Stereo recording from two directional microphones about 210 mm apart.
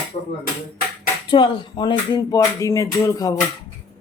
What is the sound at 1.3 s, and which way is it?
Speech, 20° left (ahead or behind).